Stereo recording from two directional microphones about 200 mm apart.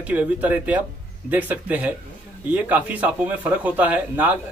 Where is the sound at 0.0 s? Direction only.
5° right (ahead or behind).